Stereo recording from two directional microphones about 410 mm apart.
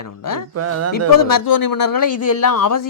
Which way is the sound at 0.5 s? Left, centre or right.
Right.